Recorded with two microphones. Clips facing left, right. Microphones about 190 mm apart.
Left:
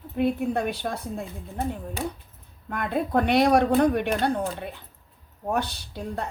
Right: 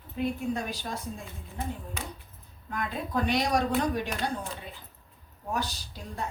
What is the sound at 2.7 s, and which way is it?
Speech, 60° left (ahead or behind).